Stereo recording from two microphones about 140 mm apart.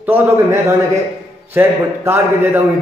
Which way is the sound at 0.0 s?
15° right (ahead or behind).